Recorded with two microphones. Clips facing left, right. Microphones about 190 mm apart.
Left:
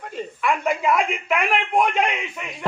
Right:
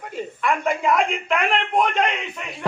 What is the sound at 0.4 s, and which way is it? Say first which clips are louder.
A man's voice: even; centre (ahead or behind).